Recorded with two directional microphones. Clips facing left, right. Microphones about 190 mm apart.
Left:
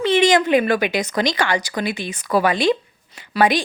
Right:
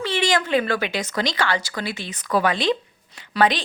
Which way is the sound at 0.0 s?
20° left (ahead or behind).